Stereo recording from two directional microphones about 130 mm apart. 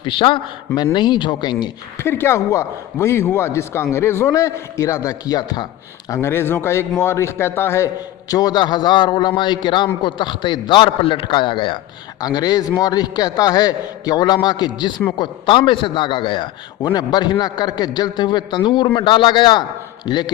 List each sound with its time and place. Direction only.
0.0 s a man's voice: 40° left (ahead or behind)
2.0 s a man's voice: 20° left (ahead or behind)
6.1 s a man's voice: 15° left (ahead or behind)
8.3 s a man's voice: 30° left (ahead or behind)